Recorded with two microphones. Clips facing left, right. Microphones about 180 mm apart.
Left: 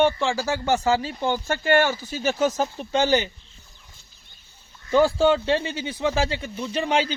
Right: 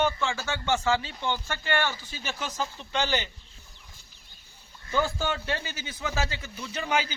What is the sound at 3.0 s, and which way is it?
Speech, 45° left (ahead or behind).